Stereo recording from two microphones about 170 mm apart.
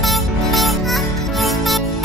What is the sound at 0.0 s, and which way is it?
Music, centre (ahead or behind).